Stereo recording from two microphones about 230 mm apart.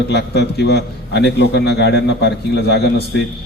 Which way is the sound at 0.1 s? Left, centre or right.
Left.